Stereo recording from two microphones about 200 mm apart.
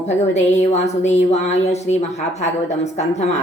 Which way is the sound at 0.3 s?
35° left (ahead or behind).